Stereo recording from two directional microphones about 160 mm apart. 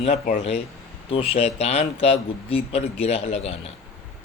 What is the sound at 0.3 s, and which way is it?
Speech, 45° left (ahead or behind).